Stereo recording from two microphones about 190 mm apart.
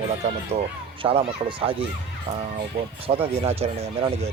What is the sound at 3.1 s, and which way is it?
Speech, 30° right (ahead or behind).